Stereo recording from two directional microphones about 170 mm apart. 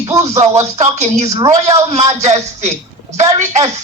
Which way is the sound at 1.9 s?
45° right (ahead or behind).